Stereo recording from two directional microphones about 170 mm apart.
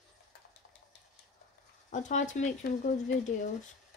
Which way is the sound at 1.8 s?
45° left (ahead or behind).